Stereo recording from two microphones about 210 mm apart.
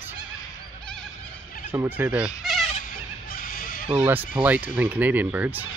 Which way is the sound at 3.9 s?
5° right (ahead or behind).